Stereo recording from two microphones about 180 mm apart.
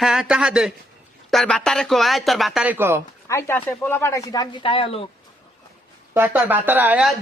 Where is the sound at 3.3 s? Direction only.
15° left (ahead or behind); by 5.0 s 30° left (ahead or behind).